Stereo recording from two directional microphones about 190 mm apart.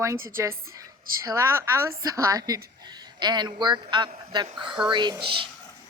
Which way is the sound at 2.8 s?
20° right (ahead or behind).